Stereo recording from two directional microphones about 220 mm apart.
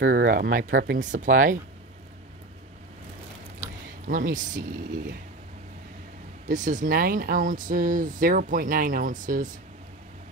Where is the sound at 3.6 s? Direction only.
35° right (ahead or behind).